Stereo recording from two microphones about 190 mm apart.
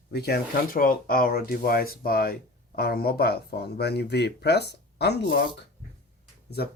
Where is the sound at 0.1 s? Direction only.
55° left (ahead or behind).